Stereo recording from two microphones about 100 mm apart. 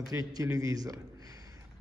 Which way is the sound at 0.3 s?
35° right (ahead or behind).